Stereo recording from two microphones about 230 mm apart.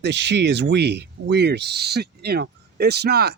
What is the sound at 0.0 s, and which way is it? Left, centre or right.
Speech, right.